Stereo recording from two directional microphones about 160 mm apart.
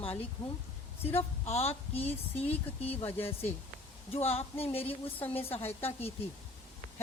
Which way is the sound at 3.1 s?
15° left (ahead or behind).